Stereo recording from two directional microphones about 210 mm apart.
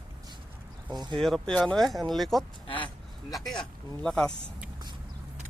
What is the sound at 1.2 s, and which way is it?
Speech, centre (ahead or behind).